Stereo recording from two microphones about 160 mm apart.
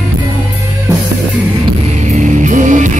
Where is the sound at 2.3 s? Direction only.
50° right (ahead or behind).